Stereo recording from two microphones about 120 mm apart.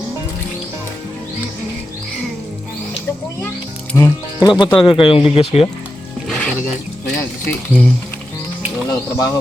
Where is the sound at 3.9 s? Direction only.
25° left (ahead or behind).